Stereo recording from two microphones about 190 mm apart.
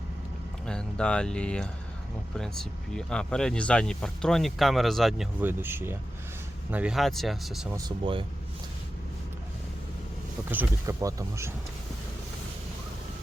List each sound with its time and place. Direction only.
0.6 s speech: 5° left (ahead or behind)
7.7 s speech: 25° right (ahead or behind)
10.5 s speech: 15° right (ahead or behind)